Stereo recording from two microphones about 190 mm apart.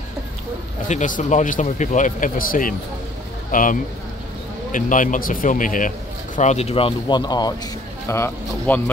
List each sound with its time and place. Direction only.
0.8 s a man's voice: 40° left (ahead or behind)
4.7 s a man's voice: 45° left (ahead or behind); by 8.9 s 10° left (ahead or behind)